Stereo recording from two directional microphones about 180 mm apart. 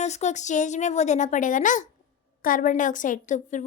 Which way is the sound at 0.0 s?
40° left (ahead or behind).